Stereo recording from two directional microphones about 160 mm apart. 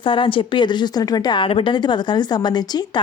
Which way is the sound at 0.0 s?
30° left (ahead or behind).